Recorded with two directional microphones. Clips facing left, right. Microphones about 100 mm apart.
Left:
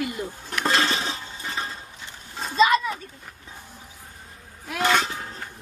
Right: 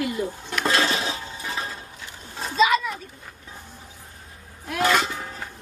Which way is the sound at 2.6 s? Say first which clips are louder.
Left 1 dB; centre (ahead or behind).